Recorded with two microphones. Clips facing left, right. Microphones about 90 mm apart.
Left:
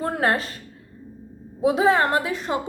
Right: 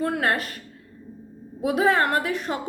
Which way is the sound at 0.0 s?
30° left (ahead or behind).